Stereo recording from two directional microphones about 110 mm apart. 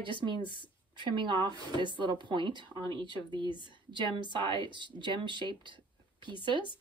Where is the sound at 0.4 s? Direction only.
45° left (ahead or behind).